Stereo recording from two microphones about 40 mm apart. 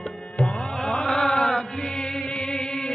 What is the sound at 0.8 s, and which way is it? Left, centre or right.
Chant, left.